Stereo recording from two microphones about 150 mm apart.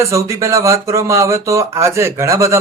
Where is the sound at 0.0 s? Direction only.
20° right (ahead or behind).